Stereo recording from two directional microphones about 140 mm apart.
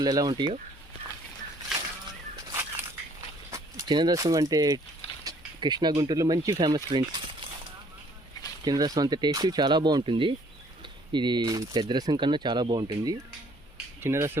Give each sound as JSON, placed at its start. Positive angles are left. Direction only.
{"t": 0.0, "sound": "speech", "side_deg": -30}
{"t": 2.5, "sound": "biting", "side_deg": -15}
{"t": 3.5, "sound": "speech", "side_deg": -25}
{"t": 8.6, "sound": "speech", "side_deg": -30}
{"t": 14.0, "sound": "speech", "side_deg": -20}